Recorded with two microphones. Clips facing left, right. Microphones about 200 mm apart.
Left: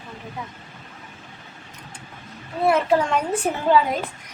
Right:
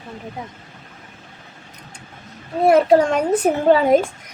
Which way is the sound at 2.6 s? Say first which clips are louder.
Right 6 dB; 40° right (ahead or behind).